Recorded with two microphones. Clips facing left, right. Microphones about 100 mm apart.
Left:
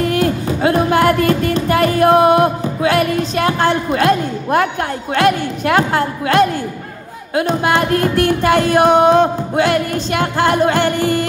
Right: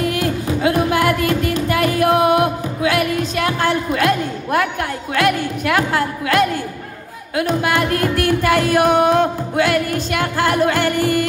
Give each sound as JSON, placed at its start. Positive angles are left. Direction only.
{"t": 0.0, "sound": "music", "side_deg": 40}